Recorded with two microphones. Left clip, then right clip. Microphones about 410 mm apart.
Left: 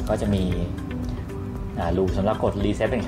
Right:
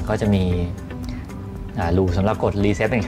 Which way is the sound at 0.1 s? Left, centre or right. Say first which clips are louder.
Right 3 dB; right.